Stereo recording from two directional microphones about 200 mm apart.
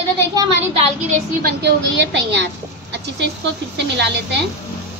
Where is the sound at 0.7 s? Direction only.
40° right (ahead or behind).